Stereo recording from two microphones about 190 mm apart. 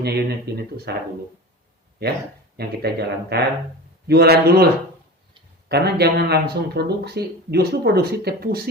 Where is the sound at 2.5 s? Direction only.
55° right (ahead or behind).